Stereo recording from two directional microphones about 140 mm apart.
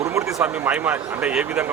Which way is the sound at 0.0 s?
20° right (ahead or behind).